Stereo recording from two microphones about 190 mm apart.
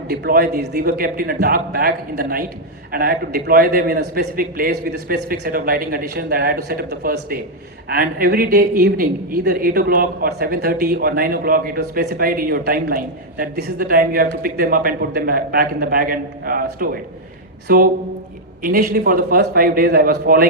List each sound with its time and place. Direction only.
0.1 s a man's voice: 50° right (ahead or behind)